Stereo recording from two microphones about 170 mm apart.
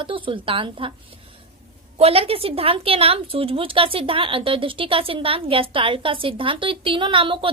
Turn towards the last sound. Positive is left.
turn(degrees=-30)  # may be behind; listen again after turning